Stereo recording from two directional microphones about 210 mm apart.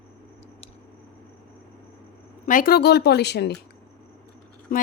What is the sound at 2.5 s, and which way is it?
Speech, 40° left (ahead or behind).